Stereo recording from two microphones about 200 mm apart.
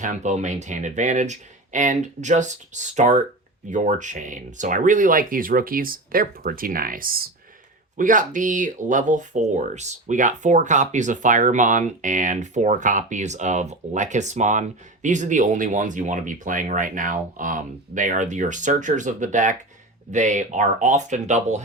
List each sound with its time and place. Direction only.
0.0 s speech: 40° right (ahead or behind)